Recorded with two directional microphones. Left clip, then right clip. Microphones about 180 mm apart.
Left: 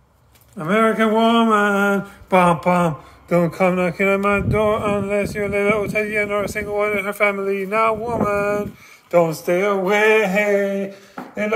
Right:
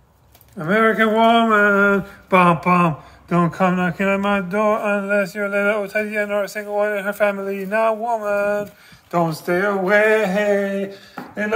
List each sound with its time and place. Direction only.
0.6 s mantra: 15° left (ahead or behind)
9.1 s speech: 20° left (ahead or behind)
10.1 s mantra: 20° left (ahead or behind)